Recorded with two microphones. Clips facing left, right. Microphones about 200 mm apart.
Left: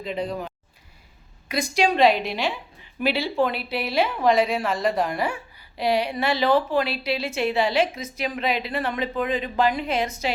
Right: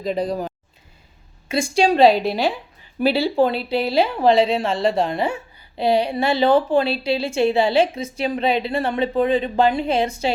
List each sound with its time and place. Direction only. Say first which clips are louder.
0.0 s a woman's voice: right 5 dB; 40° right (ahead or behind)